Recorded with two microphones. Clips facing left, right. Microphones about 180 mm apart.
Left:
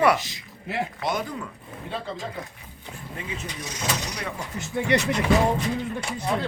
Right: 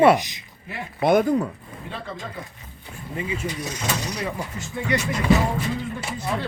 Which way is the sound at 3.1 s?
5° right (ahead or behind).